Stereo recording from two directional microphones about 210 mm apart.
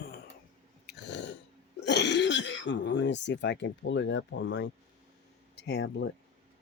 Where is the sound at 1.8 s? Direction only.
55° left (ahead or behind).